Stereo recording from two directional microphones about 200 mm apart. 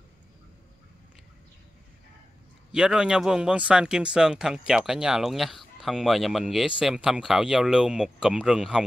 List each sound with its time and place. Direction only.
2.7 s speech: 5° right (ahead or behind)